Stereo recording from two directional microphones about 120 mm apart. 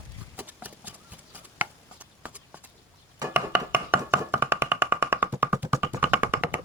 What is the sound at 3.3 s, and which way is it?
Music, 15° right (ahead or behind).